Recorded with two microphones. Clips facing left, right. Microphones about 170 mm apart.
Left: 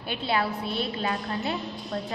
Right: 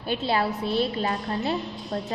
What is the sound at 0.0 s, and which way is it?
A woman's voice, 40° right (ahead or behind).